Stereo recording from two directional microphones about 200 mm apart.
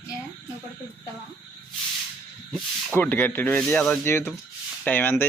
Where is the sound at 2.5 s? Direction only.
10° left (ahead or behind).